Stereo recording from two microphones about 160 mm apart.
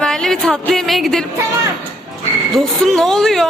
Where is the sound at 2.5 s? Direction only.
Centre (ahead or behind).